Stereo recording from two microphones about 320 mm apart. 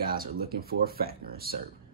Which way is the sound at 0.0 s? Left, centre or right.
Right.